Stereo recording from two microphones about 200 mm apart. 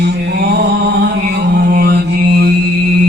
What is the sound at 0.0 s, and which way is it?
Mantra, 55° right (ahead or behind).